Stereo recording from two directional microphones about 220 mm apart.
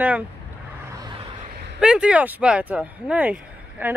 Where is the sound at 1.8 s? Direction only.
5° right (ahead or behind).